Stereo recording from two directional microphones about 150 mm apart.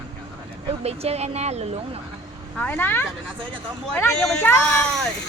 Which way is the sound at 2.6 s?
10° left (ahead or behind).